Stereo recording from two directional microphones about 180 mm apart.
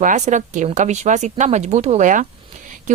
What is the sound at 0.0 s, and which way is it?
Speech, 45° right (ahead or behind).